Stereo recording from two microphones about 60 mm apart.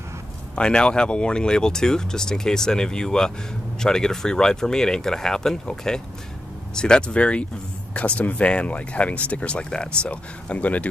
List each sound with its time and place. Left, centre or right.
0.6 s speech: centre